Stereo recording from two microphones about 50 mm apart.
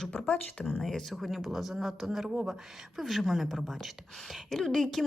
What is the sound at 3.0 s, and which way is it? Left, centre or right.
A woman's voice, centre.